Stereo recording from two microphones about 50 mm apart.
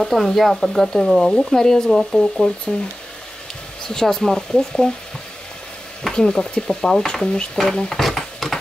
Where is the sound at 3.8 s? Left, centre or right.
Centre.